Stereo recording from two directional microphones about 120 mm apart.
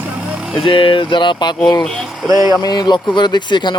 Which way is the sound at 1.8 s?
Centre (ahead or behind).